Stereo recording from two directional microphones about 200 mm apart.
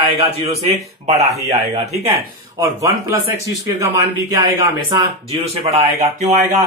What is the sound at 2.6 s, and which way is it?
A man's voice, 15° right (ahead or behind).